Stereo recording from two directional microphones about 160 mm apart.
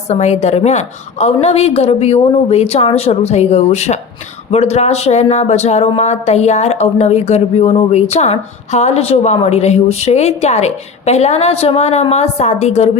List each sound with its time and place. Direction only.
0.1 s a woman's voice: 45° left (ahead or behind)